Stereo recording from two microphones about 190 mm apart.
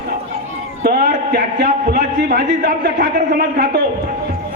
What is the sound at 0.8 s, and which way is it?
A man's voice, 55° right (ahead or behind).